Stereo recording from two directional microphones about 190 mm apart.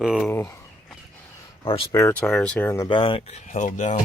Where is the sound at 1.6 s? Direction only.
30° left (ahead or behind).